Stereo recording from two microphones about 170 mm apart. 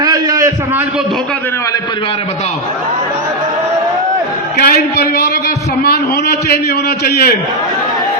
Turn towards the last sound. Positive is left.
turn(degrees=70)  # may be behind; listen again after turning